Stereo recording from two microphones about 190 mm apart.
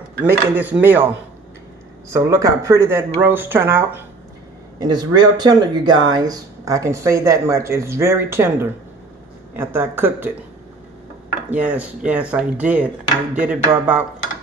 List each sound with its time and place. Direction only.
0.3 s speech: 10° right (ahead or behind)
2.0 s speech: 15° right (ahead or behind)
11.5 s speech: 5° right (ahead or behind)